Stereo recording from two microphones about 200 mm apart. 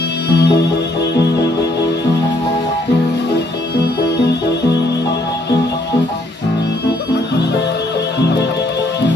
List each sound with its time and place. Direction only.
0.3 s music: 60° left (ahead or behind)